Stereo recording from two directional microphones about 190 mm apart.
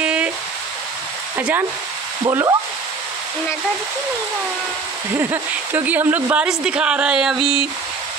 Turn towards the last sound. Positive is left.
turn(degrees=-5)  # may be behind; listen again after turning